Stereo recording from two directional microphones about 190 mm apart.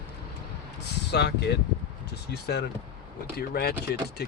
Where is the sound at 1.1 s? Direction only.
60° left (ahead or behind).